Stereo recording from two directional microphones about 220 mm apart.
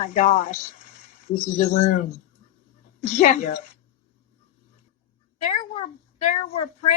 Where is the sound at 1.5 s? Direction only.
30° left (ahead or behind).